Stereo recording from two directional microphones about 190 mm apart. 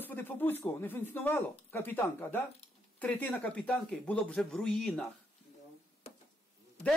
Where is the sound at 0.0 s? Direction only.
10° left (ahead or behind).